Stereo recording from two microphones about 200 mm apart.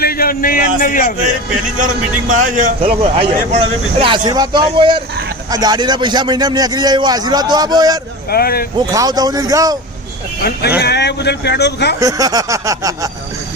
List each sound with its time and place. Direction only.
0.0 s a man's voice: 50° left (ahead or behind)
1.8 s a man's voice: 40° right (ahead or behind); by 7.9 s 20° right (ahead or behind)
8.3 s speech: 50° left (ahead or behind)
8.9 s a sound: 20° right (ahead or behind)
10.8 s speech: 55° left (ahead or behind)
11.9 s a sound: 15° right (ahead or behind)